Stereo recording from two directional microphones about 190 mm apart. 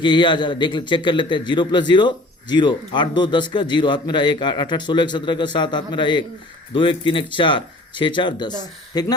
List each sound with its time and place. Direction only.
0.0 s a man's voice: 25° left (ahead or behind)